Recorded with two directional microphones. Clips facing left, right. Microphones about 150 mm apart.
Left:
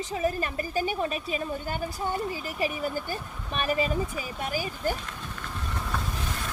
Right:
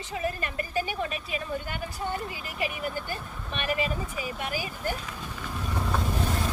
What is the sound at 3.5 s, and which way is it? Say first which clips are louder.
Speech: left 3 dB; 40° left (ahead or behind).